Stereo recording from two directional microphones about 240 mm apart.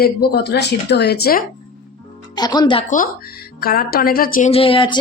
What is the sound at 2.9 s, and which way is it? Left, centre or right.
Speech, left.